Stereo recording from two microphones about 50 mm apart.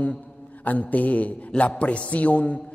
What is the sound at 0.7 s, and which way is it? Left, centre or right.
A man's voice, left.